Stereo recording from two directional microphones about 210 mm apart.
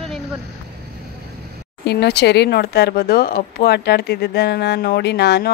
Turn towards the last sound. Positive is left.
turn(degrees=50)  # may be behind; listen again after turning